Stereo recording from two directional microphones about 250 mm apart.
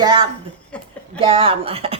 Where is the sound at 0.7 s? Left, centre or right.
Centre.